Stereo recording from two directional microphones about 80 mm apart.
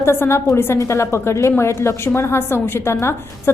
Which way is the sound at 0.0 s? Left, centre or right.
Left.